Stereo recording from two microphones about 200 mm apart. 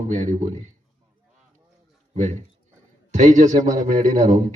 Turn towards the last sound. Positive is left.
turn(degrees=-35)  # may be behind; listen again after turning